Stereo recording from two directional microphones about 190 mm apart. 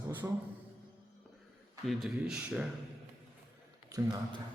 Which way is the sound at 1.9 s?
Centre (ahead or behind).